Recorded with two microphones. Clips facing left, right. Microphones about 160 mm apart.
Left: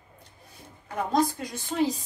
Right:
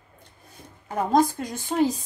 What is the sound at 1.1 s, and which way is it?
Speech, 50° right (ahead or behind).